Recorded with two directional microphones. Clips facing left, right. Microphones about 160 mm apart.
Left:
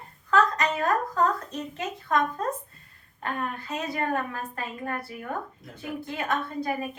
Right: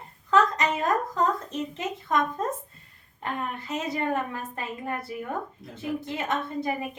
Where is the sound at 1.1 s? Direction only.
20° right (ahead or behind).